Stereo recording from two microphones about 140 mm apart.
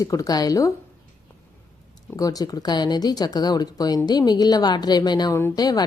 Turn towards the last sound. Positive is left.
turn(degrees=30)  # may be behind; listen again after turning